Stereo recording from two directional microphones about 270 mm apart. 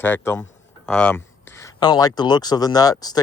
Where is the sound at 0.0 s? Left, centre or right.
Centre.